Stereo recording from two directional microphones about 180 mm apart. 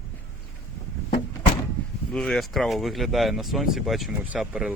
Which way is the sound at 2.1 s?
5° left (ahead or behind).